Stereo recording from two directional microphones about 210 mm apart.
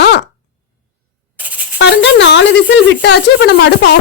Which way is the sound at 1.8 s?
55° left (ahead or behind).